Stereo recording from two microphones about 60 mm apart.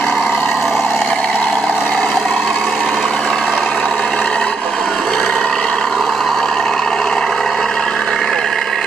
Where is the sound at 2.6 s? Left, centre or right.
Centre.